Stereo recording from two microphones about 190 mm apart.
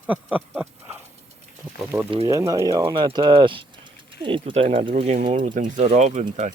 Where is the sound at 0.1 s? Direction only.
5° right (ahead or behind).